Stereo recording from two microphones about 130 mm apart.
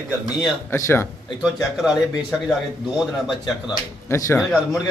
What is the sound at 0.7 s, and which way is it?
Speech, 20° left (ahead or behind).